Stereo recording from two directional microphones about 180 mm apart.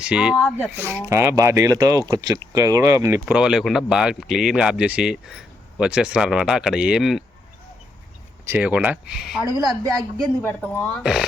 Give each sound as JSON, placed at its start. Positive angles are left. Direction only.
{"t": 0.0, "sound": "speech", "side_deg": -5}
{"t": 0.3, "sound": "speech", "side_deg": 10}
{"t": 0.8, "sound": "speech", "side_deg": -15}
{"t": 8.4, "sound": "speech", "side_deg": -10}
{"t": 9.5, "sound": "a woman's voice", "side_deg": -20}
{"t": 10.4, "sound": "speech", "side_deg": 10}